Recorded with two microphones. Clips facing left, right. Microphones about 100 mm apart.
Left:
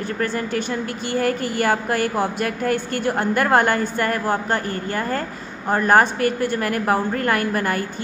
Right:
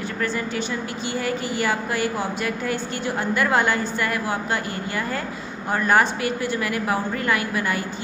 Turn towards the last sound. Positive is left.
turn(degrees=50)  # may be behind; listen again after turning